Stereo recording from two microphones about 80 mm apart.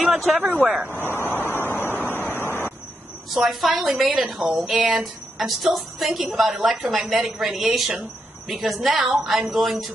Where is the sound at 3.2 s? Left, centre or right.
Centre.